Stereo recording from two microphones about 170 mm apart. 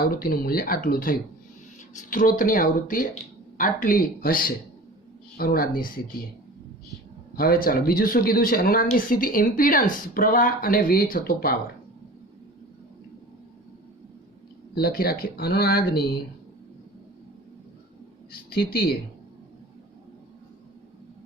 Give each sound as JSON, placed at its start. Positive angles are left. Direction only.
{"t": 0.0, "sound": "speech", "side_deg": 60}
{"t": 7.3, "sound": "speech", "side_deg": 60}
{"t": 14.8, "sound": "speech", "side_deg": 65}
{"t": 18.5, "sound": "speech", "side_deg": 65}